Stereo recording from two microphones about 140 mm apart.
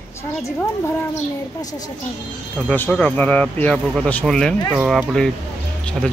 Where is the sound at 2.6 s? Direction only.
5° left (ahead or behind).